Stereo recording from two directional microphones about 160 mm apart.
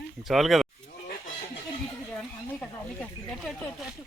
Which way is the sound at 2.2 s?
10° left (ahead or behind).